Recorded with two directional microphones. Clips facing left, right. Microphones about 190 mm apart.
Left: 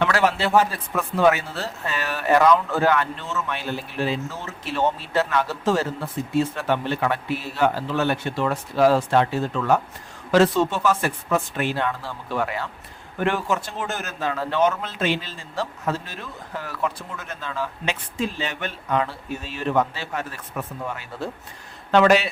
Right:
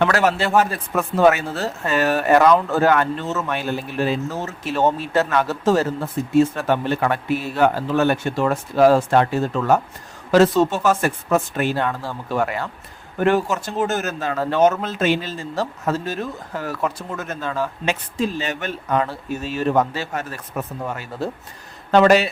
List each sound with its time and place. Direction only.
0.0 s a man's voice: 45° right (ahead or behind)